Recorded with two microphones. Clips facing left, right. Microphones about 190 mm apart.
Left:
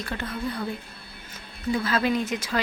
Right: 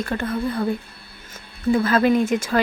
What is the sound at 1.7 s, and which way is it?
Speech, 50° right (ahead or behind).